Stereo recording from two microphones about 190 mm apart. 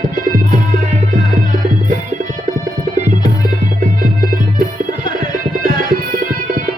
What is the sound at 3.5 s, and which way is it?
Music, 45° right (ahead or behind).